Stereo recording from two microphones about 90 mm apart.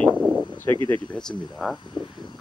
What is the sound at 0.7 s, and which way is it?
Speech, 25° left (ahead or behind).